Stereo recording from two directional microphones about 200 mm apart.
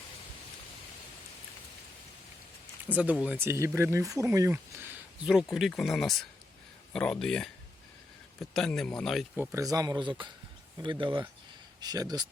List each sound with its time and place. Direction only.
2.9 s speech: 5° right (ahead or behind)
9.3 s speech: 10° right (ahead or behind)
11.8 s speech: 20° right (ahead or behind)